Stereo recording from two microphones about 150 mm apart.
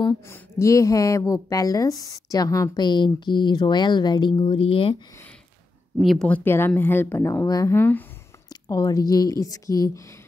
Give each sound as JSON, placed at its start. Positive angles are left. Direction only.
{"t": 0.3, "sound": "speech", "side_deg": 20}
{"t": 5.9, "sound": "speech", "side_deg": 0}